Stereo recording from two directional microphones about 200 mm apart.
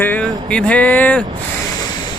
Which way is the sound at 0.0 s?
10° left (ahead or behind).